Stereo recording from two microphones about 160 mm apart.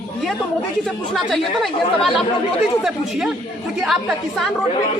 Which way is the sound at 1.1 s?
Centre (ahead or behind).